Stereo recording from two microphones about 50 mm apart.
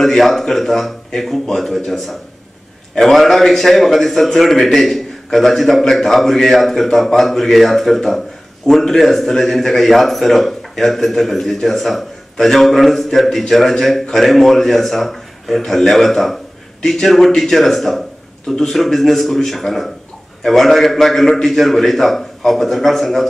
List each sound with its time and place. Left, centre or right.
0.0 s a man's voice: centre